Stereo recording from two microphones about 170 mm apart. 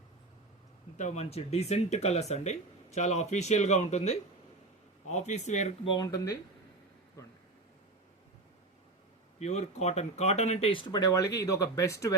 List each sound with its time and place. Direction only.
0.9 s speech: 45° left (ahead or behind); by 6.4 s 20° left (ahead or behind)
9.4 s speech: 40° left (ahead or behind); by 12.1 s 20° left (ahead or behind)